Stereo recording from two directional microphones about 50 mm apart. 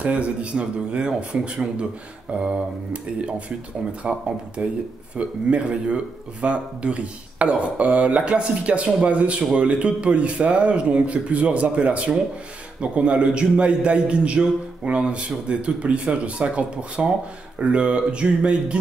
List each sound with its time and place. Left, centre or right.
0.0 s a man's voice: right